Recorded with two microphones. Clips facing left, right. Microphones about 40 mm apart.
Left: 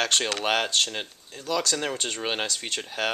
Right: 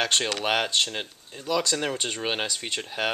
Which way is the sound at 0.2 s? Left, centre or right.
Centre.